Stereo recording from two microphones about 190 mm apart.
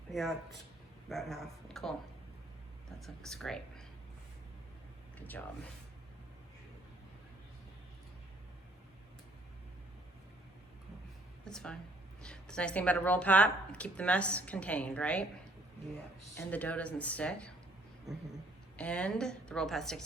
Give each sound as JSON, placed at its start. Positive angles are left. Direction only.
{"t": 0.1, "sound": "a woman's voice", "side_deg": 0}
{"t": 3.2, "sound": "a woman's voice", "side_deg": 0}
{"t": 5.1, "sound": "speech", "side_deg": 10}
{"t": 11.4, "sound": "a woman's voice", "side_deg": 5}
{"t": 16.3, "sound": "a woman's voice", "side_deg": 10}
{"t": 18.8, "sound": "a woman's voice", "side_deg": 5}